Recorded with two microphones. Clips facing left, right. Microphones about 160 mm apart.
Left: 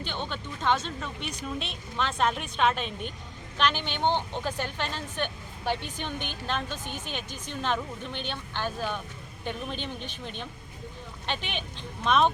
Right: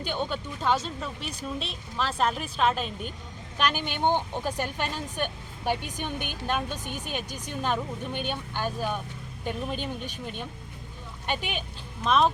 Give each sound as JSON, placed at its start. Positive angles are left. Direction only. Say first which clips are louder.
{"t": 0.0, "sound": "a woman's voice", "louder": "right 4 dB", "side_deg": -10}